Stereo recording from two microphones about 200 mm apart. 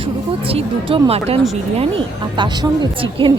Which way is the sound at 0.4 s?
30° right (ahead or behind).